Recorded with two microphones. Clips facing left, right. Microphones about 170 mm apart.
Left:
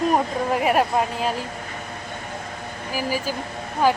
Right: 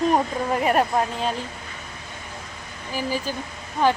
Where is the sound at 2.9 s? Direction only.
10° left (ahead or behind).